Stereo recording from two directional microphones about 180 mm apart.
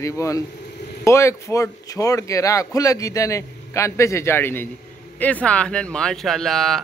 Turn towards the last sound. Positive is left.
turn(degrees=0)  # may be behind; listen again after turning